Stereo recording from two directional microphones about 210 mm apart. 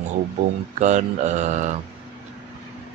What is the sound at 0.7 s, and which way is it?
Speech, 35° right (ahead or behind).